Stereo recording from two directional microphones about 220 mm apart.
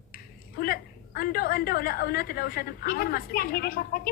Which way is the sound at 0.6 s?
45° left (ahead or behind).